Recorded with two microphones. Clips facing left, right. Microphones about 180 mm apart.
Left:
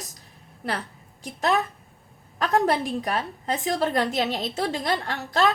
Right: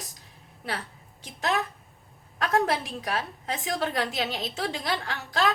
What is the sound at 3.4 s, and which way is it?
A woman's voice, 40° left (ahead or behind).